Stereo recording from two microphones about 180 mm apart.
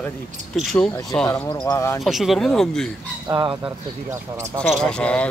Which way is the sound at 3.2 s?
20° right (ahead or behind).